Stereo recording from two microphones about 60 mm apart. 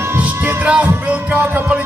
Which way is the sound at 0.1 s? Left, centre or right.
Right.